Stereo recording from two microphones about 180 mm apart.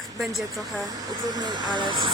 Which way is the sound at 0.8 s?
20° right (ahead or behind).